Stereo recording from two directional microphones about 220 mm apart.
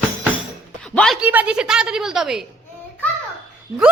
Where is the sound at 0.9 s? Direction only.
5° left (ahead or behind).